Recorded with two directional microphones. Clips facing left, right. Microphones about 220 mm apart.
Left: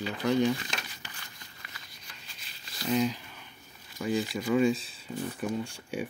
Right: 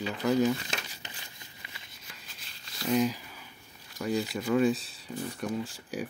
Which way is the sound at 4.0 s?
Centre (ahead or behind).